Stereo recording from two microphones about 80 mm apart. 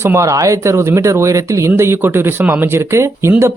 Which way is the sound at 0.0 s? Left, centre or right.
Right.